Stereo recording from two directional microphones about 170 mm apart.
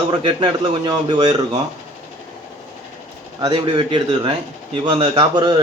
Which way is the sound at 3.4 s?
25° right (ahead or behind).